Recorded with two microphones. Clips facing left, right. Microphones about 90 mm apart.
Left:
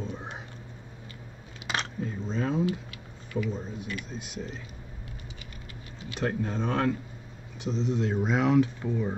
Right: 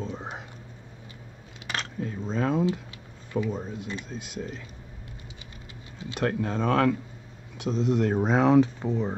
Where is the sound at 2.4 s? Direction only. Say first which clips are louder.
Right 3 dB; 60° right (ahead or behind).